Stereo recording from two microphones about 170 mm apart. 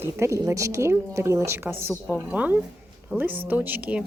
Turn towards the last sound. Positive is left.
turn(degrees=-10)  # may be behind; listen again after turning